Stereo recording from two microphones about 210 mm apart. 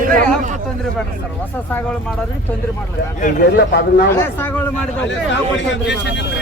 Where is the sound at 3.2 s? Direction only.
50° left (ahead or behind).